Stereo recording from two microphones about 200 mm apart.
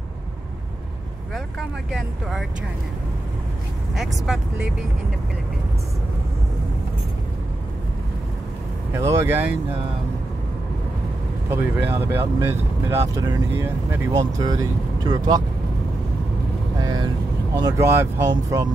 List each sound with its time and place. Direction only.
1.3 s speech: centre (ahead or behind)
3.9 s speech: centre (ahead or behind)
8.9 s speech: 15° right (ahead or behind)
11.5 s speech: 10° right (ahead or behind)
16.8 s vehicle: 20° right (ahead or behind)
17.6 s speech: 15° right (ahead or behind)